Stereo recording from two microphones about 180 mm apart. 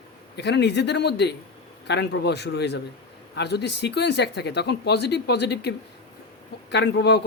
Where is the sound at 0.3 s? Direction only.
70° left (ahead or behind).